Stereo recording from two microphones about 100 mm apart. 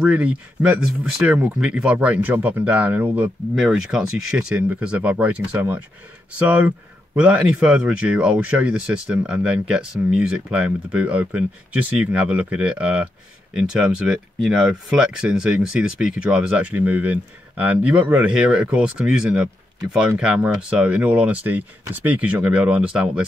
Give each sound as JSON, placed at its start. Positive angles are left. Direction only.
{"t": 0.0, "sound": "speech", "side_deg": -15}
{"t": 3.5, "sound": "speech", "side_deg": -5}